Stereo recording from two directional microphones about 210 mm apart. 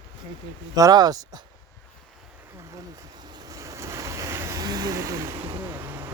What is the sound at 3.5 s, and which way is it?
Waves, 15° right (ahead or behind).